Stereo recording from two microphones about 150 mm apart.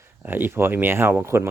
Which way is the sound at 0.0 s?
15° right (ahead or behind).